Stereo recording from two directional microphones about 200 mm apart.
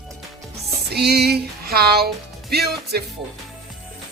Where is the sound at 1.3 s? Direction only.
50° right (ahead or behind).